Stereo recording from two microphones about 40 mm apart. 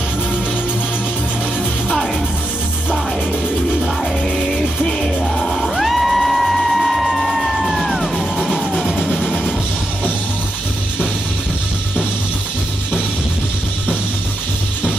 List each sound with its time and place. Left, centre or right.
4.6 s music: centre
9.1 s music: right